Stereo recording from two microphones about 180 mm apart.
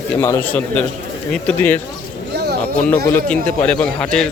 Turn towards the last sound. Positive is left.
turn(degrees=5)  # may be behind; listen again after turning